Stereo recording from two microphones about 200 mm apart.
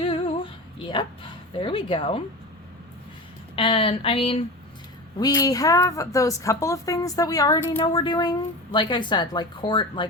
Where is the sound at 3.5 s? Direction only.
25° left (ahead or behind).